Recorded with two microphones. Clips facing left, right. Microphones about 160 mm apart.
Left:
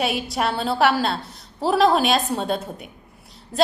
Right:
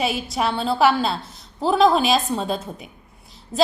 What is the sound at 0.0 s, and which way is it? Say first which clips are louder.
A woman's voice: even; centre (ahead or behind).